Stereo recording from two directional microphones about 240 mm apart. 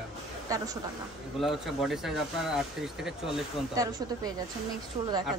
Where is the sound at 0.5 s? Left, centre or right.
Centre.